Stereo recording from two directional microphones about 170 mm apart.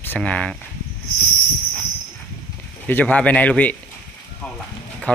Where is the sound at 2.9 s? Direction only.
10° left (ahead or behind).